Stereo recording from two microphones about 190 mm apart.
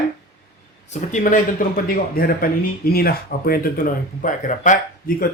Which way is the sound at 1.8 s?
50° left (ahead or behind).